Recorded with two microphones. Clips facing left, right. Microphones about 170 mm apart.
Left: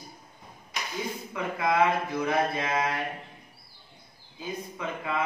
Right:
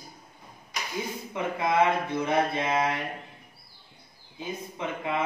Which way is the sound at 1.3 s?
25° right (ahead or behind).